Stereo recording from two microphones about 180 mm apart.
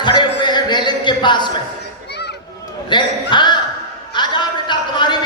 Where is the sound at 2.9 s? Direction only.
25° left (ahead or behind).